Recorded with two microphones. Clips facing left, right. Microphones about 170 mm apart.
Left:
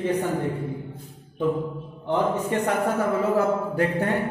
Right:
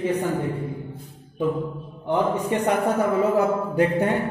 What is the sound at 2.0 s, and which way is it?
A man's voice, 20° right (ahead or behind).